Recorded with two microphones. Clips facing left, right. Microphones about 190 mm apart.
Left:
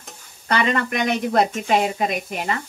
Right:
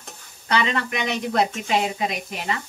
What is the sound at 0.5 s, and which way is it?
A woman's voice, 50° left (ahead or behind).